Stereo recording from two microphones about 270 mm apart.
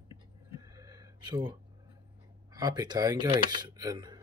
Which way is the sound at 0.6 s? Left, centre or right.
Centre.